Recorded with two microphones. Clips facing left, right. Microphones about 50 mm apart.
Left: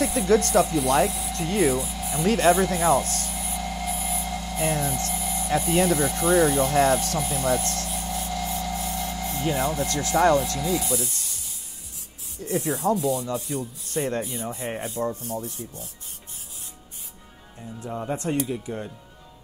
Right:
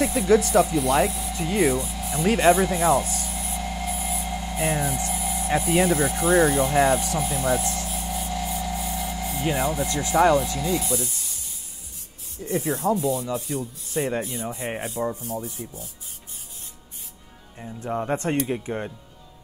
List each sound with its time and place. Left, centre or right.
0.0 s speech: centre
2.2 s rub: centre
4.4 s a sound: centre
5.6 s speech: centre
12.5 s speech: centre
17.6 s speech: right